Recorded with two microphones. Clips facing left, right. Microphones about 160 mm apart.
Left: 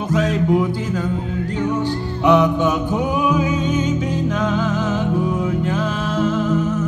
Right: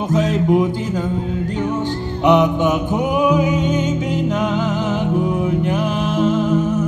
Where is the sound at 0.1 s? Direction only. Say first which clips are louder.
Right 1 dB; 20° right (ahead or behind).